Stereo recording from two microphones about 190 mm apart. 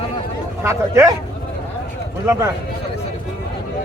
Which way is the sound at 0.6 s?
15° right (ahead or behind).